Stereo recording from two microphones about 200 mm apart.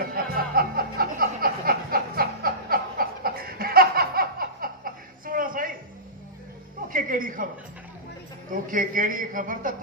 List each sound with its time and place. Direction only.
0.0 s music: 45° right (ahead or behind)
6.9 s a sound: 45° right (ahead or behind)
8.6 s a man's voice: 40° right (ahead or behind)